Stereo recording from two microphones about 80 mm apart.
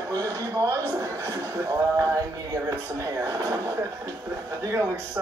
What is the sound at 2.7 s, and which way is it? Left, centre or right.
Speech, right.